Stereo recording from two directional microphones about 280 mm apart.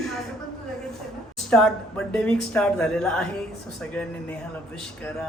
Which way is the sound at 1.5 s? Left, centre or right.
Centre.